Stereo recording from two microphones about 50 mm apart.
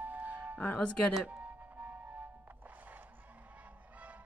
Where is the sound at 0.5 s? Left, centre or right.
Left.